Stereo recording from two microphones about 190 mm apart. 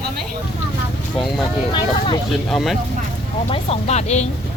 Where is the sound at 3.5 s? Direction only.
30° left (ahead or behind).